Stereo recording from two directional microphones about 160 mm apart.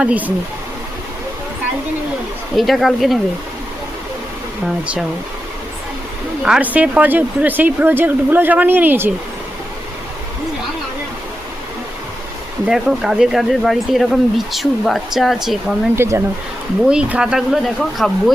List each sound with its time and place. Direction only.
0.0 s speech: 10° right (ahead or behind)
2.6 s speech: centre (ahead or behind)
4.6 s speech: centre (ahead or behind)
6.4 s speech: 5° right (ahead or behind)
12.6 s speech: 5° right (ahead or behind)
16.0 s speech: 15° right (ahead or behind)
16.8 s speech: 5° right (ahead or behind)